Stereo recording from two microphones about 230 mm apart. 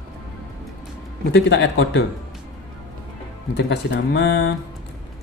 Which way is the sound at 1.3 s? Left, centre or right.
Left.